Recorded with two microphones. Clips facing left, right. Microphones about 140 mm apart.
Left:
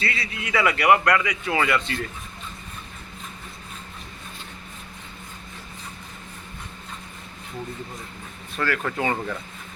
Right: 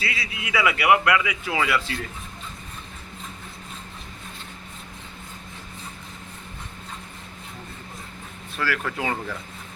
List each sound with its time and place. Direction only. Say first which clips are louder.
0.0 s a man's voice: left 2 dB; 5° right (ahead or behind)
8.5 s a man's voice: left 2 dB; 5° right (ahead or behind)